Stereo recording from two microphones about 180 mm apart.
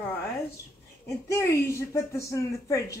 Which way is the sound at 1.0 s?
15° left (ahead or behind).